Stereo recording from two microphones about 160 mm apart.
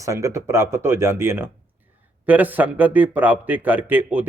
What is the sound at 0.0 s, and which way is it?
A man's voice, 20° right (ahead or behind).